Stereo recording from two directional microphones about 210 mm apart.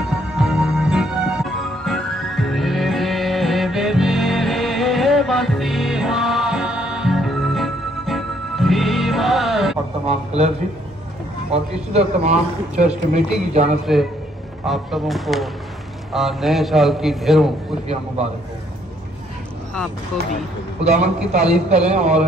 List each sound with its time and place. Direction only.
0.1 s music: 5° right (ahead or behind)
10.0 s a man's voice: 30° right (ahead or behind)
11.5 s speech: 30° right (ahead or behind)
13.9 s a man's voice: centre (ahead or behind)
20.8 s speech: 30° right (ahead or behind)